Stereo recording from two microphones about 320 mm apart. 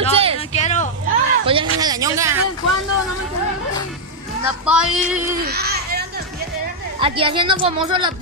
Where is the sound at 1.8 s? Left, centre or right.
Centre.